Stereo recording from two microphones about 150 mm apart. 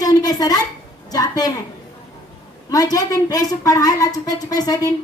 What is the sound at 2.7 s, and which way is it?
Speech, 25° left (ahead or behind).